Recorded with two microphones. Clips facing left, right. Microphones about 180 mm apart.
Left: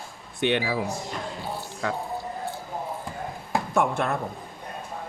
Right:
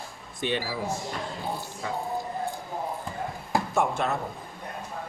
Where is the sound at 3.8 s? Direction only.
55° left (ahead or behind).